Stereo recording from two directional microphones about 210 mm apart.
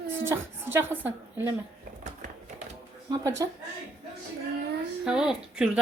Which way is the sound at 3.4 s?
15° right (ahead or behind).